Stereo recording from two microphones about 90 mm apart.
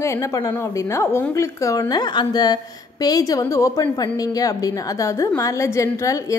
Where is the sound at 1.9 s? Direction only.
55° left (ahead or behind); by 6.4 s 35° left (ahead or behind).